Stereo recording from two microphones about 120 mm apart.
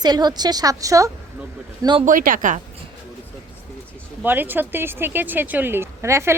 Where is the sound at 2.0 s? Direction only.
90° right.